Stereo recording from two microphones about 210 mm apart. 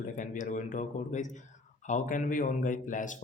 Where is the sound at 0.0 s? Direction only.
40° left (ahead or behind).